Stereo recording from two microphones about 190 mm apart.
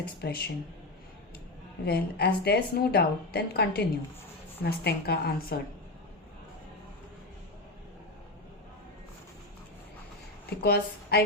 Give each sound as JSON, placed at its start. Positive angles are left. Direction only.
{"t": 0.2, "sound": "a woman's voice", "side_deg": 55}
{"t": 1.8, "sound": "a woman's voice", "side_deg": 55}
{"t": 10.6, "sound": "a woman's voice", "side_deg": 55}